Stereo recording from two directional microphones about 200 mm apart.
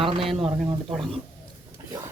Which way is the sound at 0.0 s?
25° right (ahead or behind).